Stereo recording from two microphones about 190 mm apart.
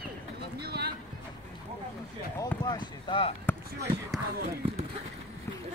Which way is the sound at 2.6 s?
25° left (ahead or behind).